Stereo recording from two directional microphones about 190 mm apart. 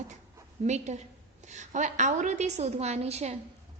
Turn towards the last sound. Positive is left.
turn(degrees=-35)  # may be behind; listen again after turning